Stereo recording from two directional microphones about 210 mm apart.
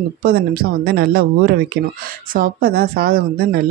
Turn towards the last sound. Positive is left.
turn(degrees=-45)  # may be behind; listen again after turning